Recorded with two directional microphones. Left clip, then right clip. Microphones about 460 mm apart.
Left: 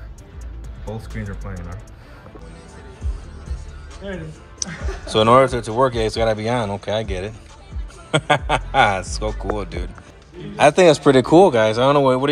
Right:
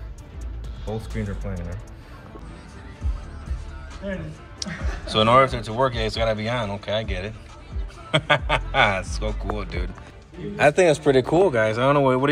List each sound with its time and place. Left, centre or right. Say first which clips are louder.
0.8 s speech: right 1 dB; centre
4.6 s speech: left 3 dB; centre
10.8 s a man's voice: left 5 dB; left
11.4 s speech: left 5 dB; centre